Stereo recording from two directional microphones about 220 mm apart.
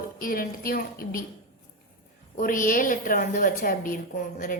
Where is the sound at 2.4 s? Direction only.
35° left (ahead or behind).